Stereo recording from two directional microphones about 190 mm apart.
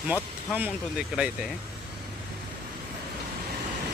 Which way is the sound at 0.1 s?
10° right (ahead or behind).